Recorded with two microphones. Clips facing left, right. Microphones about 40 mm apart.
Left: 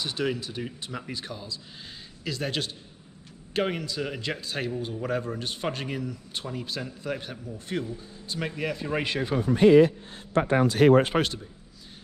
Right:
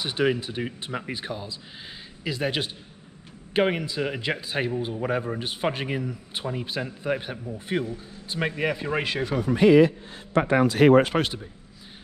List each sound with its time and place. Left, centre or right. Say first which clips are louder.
0.0 s a man's voice: right 5 dB; right
9.4 s a man's voice: even; right
10.4 s speech: right 2 dB; right
10.7 s speech: right 2 dB; right